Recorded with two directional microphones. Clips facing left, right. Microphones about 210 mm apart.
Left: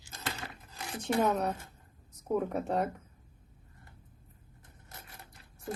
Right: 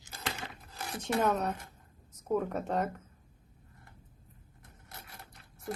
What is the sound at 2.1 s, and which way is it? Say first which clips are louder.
Speech: even; 10° left (ahead or behind).